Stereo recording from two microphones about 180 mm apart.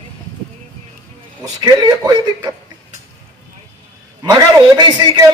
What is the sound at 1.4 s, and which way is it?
A man's voice, 20° right (ahead or behind).